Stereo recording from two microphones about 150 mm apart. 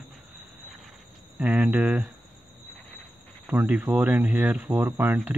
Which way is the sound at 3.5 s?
5° right (ahead or behind).